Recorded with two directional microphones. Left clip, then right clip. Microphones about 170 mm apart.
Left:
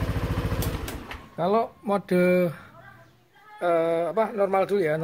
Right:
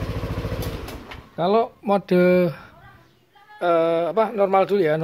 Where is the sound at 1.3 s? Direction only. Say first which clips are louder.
Right 4 dB; 40° right (ahead or behind).